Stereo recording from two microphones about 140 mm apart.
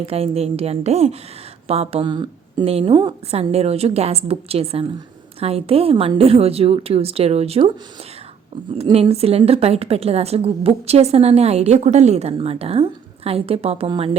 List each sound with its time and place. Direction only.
0.0 s a woman's voice: 45° right (ahead or behind)
2.6 s a woman's voice: 45° right (ahead or behind)
3.5 s a woman's voice: 45° right (ahead or behind)
8.8 s a woman's voice: 45° right (ahead or behind)